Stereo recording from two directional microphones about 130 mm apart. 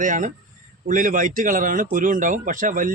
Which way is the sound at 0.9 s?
85° right.